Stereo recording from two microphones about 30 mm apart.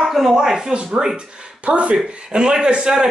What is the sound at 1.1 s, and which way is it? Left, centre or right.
Speech, right.